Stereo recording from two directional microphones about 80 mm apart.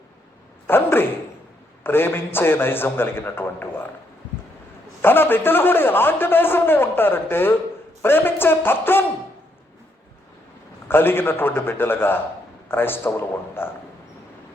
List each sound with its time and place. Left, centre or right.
0.7 s a man's voice: left
5.0 s a man's voice: left
10.8 s a man's voice: left